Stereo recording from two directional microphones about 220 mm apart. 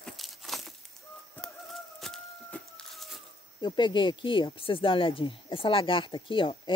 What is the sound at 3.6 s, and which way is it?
Speech, 20° left (ahead or behind).